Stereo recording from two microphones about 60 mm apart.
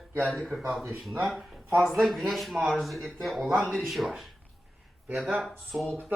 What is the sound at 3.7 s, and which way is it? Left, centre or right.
Speech, centre.